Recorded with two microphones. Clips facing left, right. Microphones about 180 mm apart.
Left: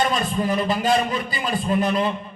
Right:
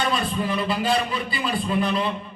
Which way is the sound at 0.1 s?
40° left (ahead or behind).